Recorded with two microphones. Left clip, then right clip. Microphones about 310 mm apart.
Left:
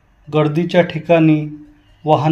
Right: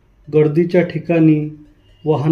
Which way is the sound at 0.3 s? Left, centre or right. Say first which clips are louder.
Right 3 dB; left.